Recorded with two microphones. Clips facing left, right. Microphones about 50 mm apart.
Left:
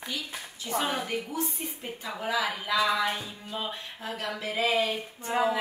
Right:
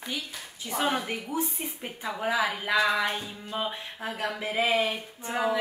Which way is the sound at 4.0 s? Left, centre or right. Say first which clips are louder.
Right 3 dB; right.